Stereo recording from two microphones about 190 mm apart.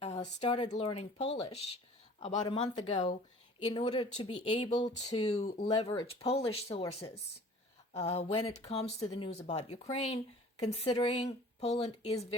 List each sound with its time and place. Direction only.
0.0 s speech: 35° left (ahead or behind)